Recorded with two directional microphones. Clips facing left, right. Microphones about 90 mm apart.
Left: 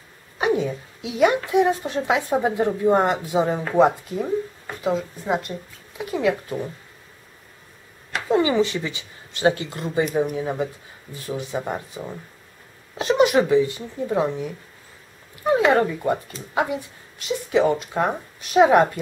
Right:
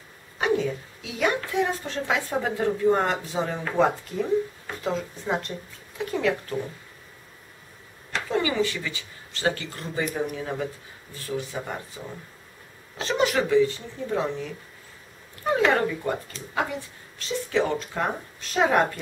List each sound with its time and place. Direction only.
0.4 s a woman's voice: 20° left (ahead or behind)
8.3 s a woman's voice: 25° left (ahead or behind)
13.0 s speech: 15° left (ahead or behind)
15.5 s speech: 15° left (ahead or behind)
17.2 s speech: 15° left (ahead or behind)